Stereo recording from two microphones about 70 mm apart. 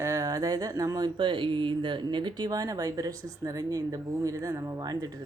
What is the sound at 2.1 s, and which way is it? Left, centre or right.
Speech, right.